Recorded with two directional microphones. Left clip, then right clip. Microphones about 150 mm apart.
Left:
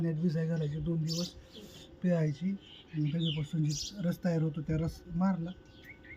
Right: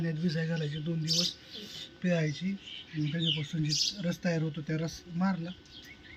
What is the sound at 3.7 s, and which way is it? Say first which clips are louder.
Speech: right 9 dB; 40° left (ahead or behind).